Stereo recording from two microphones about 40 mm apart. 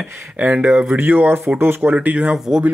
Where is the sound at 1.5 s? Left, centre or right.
Right.